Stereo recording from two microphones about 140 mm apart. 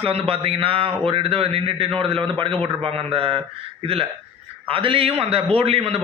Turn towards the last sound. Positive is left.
turn(degrees=-45)  # may be behind; listen again after turning